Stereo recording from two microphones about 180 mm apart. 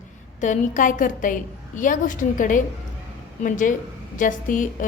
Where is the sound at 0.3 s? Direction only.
45° left (ahead or behind).